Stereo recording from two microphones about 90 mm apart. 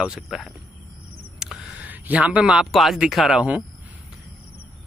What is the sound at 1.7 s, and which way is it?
A man's voice, 15° right (ahead or behind).